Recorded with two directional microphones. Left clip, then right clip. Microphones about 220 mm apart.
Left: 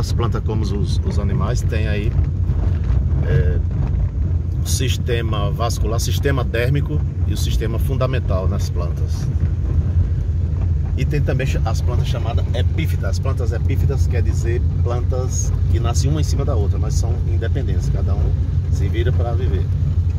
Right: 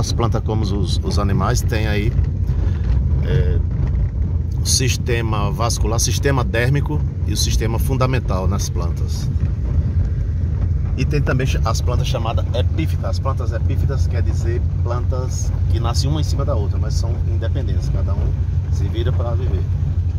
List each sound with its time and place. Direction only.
0.2 s speech: 20° right (ahead or behind)
1.1 s speech: 35° right (ahead or behind)
4.6 s speech: 25° right (ahead or behind)
11.1 s speech: 10° right (ahead or behind)
11.6 s speech: 40° right (ahead or behind)
15.8 s speech: 10° right (ahead or behind)